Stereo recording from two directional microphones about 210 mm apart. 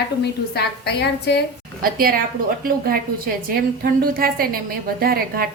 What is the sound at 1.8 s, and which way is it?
A woman's voice, 45° right (ahead or behind).